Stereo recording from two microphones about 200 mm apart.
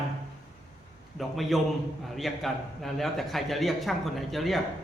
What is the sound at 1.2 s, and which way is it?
A man's voice, centre (ahead or behind).